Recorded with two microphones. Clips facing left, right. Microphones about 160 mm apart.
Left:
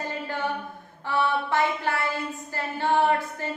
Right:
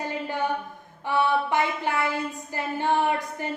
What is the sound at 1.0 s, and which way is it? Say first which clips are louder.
A woman's voice: right 2 dB; 15° right (ahead or behind).